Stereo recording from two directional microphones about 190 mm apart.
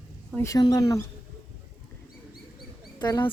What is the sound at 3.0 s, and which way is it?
Speech, 25° left (ahead or behind).